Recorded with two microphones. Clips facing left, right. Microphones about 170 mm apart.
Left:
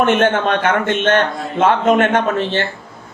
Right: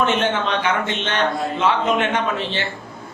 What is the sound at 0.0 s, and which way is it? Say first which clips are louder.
A man's voice: left 5 dB; 55° left (ahead or behind).